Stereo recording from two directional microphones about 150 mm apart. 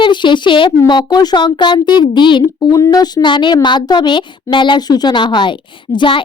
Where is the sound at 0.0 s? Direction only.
30° left (ahead or behind).